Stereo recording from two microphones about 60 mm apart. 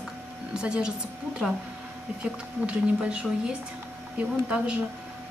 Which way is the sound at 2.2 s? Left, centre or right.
Centre.